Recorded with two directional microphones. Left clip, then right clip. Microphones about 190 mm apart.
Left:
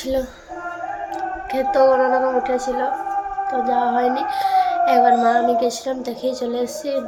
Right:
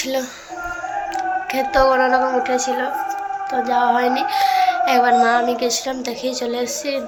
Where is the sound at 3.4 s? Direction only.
15° left (ahead or behind).